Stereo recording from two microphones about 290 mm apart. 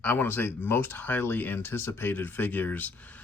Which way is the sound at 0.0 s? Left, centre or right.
Centre.